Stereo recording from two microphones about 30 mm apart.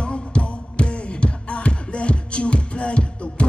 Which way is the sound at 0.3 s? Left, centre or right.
Left.